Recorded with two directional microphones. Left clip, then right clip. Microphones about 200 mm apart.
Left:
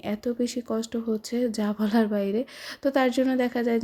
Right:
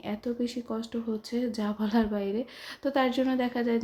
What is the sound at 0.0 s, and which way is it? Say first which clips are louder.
Speech: left 4 dB; 30° left (ahead or behind).